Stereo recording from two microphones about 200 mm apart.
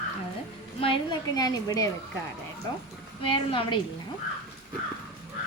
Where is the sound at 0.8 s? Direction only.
25° left (ahead or behind).